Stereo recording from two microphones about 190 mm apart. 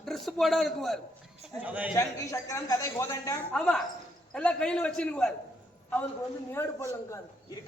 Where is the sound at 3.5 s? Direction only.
5° left (ahead or behind).